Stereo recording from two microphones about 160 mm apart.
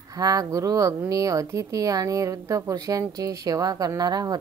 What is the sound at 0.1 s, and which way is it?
A woman's voice, 25° right (ahead or behind).